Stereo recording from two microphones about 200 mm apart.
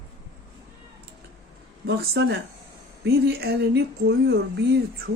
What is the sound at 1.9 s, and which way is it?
Speech, 60° right (ahead or behind).